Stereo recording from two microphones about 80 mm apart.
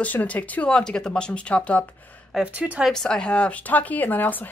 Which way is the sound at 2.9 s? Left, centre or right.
Centre.